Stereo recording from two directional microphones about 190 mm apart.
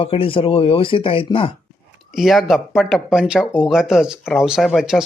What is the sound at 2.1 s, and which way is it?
Speech, centre (ahead or behind).